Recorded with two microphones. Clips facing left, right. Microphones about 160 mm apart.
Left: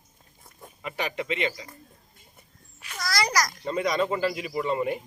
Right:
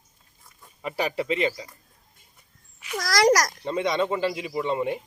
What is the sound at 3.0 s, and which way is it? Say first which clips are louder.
Speech: right 7 dB; 90° right.